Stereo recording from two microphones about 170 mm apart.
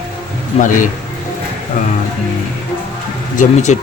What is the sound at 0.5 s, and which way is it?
Speech, 35° left (ahead or behind).